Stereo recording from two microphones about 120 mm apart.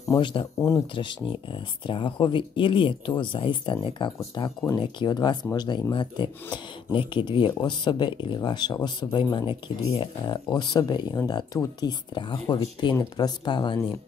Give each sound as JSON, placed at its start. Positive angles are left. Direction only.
{"t": 0.1, "sound": "speech", "side_deg": 40}
{"t": 0.6, "sound": "speech", "side_deg": 25}
{"t": 0.9, "sound": "speech", "side_deg": 45}